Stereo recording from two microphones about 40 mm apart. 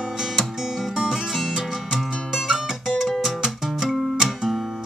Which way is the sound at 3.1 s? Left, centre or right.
Centre.